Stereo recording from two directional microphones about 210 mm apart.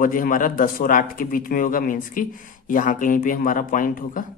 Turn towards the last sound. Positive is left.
turn(degrees=40)  # may be behind; listen again after turning